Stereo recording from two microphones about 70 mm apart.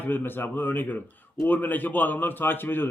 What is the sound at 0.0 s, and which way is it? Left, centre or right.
Speech, left.